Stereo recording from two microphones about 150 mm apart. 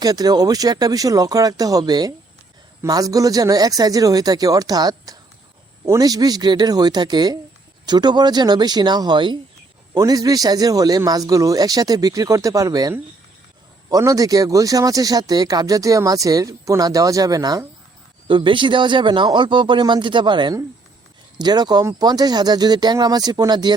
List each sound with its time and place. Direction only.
0.0 s speech: 25° right (ahead or behind)